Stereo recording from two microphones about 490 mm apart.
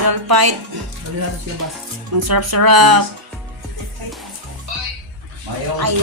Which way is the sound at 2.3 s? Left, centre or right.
Right.